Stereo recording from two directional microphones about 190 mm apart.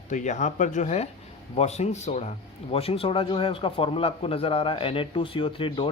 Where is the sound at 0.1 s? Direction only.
40° left (ahead or behind).